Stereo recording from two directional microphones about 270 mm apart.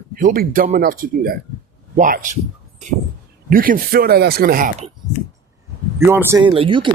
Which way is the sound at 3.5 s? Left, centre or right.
Right.